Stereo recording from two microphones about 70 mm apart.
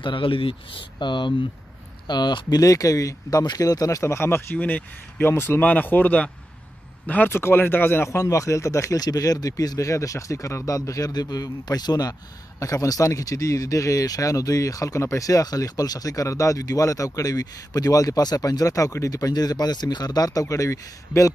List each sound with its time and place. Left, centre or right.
1.0 s speech: left
2.6 s speech: left
4.0 s speech: left
4.6 s speech: left
7.3 s speech: left
8.2 s speech: left
9.0 s speech: left